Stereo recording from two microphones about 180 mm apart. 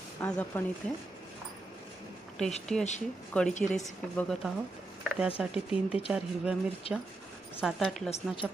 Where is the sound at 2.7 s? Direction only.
5° left (ahead or behind).